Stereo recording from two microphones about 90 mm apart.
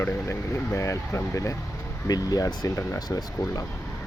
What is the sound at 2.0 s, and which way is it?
Speech, 45° left (ahead or behind).